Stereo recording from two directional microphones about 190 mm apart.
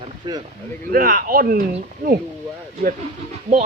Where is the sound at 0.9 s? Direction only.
50° right (ahead or behind).